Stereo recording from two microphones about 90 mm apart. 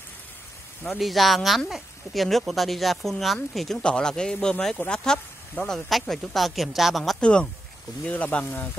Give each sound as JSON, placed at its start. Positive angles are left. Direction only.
{"t": 0.9, "sound": "speech", "side_deg": 0}
{"t": 5.9, "sound": "speech", "side_deg": 0}
{"t": 7.2, "sound": "speech", "side_deg": 10}